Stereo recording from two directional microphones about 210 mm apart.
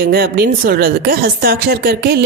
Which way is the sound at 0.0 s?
50° right (ahead or behind).